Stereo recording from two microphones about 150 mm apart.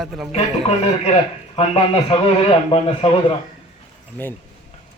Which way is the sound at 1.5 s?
40° left (ahead or behind).